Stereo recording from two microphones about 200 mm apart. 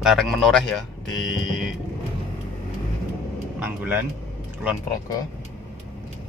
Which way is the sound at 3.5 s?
10° right (ahead or behind).